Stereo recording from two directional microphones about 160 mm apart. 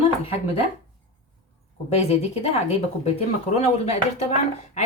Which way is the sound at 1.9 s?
40° left (ahead or behind).